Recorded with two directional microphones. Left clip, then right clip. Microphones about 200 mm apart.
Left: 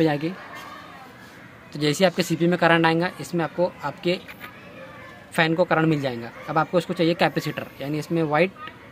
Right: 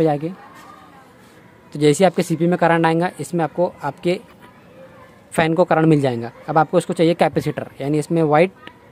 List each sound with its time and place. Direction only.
0.0 s speech: 40° right (ahead or behind)
1.7 s speech: 55° right (ahead or behind)
5.3 s a man's voice: 55° right (ahead or behind)